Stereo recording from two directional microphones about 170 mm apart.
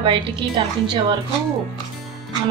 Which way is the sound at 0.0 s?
30° right (ahead or behind).